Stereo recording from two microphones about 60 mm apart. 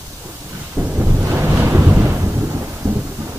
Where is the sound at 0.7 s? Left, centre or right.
Right.